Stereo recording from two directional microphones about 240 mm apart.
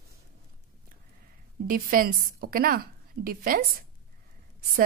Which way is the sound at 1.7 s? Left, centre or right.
Right.